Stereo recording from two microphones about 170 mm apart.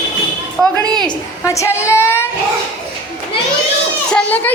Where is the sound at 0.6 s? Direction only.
5° left (ahead or behind).